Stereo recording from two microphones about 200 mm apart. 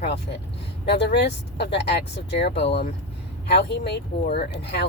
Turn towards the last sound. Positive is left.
turn(degrees=55)  # may be behind; listen again after turning